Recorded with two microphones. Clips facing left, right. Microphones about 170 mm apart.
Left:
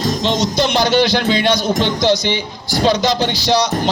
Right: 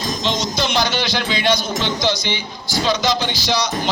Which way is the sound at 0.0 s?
60° left (ahead or behind).